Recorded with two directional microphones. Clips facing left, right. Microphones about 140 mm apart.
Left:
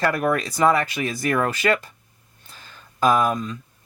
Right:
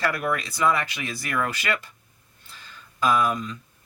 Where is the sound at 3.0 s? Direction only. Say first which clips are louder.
Left 3 dB; 40° left (ahead or behind).